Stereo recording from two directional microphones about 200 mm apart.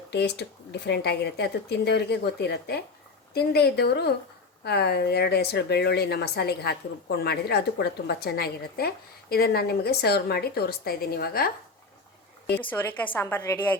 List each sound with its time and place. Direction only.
0.1 s a woman's voice: 55° left (ahead or behind)
12.7 s a woman's voice: 10° left (ahead or behind)